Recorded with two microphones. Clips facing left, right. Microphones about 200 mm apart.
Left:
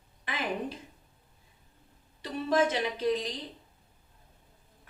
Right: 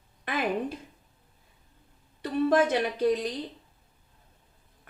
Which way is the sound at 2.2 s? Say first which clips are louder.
Right 4 dB; 55° right (ahead or behind).